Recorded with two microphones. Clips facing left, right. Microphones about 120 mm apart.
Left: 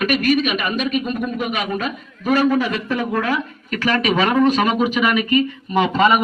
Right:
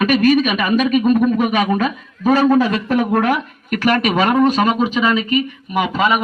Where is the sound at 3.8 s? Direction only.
45° right (ahead or behind); by 5.8 s 20° right (ahead or behind).